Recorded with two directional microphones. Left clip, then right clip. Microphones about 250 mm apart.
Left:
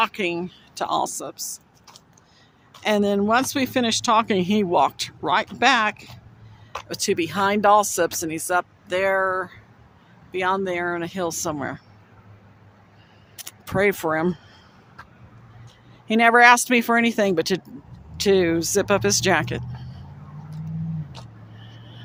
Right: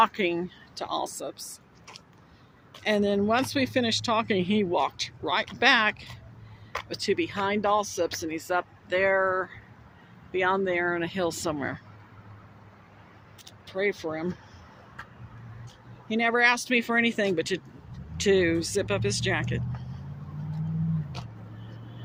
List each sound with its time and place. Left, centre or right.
0.0 s speech: centre
2.8 s speech: centre
13.3 s single-lens reflex camera: left
16.0 s speech: left